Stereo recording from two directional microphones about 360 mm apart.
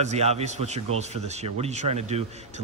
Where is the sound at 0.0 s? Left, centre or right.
Centre.